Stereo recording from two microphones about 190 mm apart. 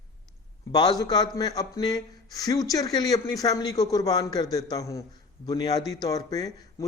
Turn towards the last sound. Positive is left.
turn(degrees=20)  # may be behind; listen again after turning